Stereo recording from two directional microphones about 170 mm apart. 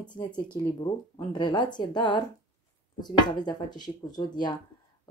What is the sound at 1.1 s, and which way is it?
Speech, 25° left (ahead or behind).